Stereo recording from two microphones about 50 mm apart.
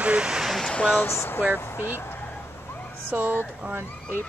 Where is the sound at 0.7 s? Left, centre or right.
Left.